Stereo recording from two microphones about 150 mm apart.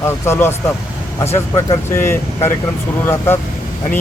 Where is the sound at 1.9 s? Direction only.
15° left (ahead or behind).